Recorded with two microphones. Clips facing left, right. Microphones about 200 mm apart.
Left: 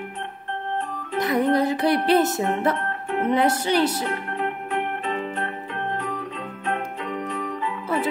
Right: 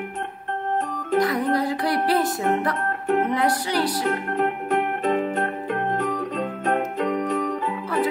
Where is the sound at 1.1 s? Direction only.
25° left (ahead or behind).